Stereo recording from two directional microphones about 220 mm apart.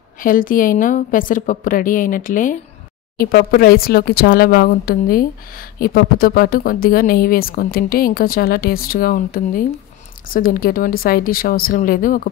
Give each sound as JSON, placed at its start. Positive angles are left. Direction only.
{"t": 0.2, "sound": "a woman's voice", "side_deg": 40}